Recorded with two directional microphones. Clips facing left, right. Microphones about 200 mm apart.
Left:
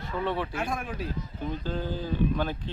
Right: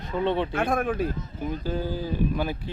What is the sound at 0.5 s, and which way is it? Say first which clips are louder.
Speech: right 7 dB; 55° right (ahead or behind).